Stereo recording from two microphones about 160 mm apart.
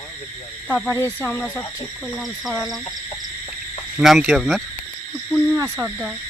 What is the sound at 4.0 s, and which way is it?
Speech, centre (ahead or behind).